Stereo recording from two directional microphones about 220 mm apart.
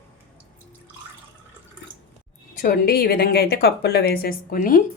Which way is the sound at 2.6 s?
40° left (ahead or behind).